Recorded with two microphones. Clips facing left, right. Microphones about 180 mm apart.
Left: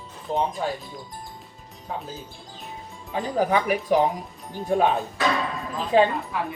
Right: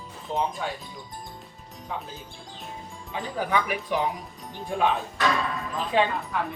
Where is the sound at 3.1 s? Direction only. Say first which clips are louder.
Left 5 dB; 40° left (ahead or behind).